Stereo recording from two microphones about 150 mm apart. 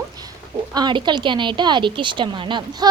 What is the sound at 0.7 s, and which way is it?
A woman's voice, 30° right (ahead or behind).